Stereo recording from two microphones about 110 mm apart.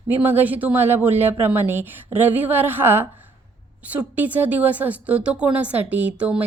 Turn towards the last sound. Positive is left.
turn(degrees=-10)  # may be behind; listen again after turning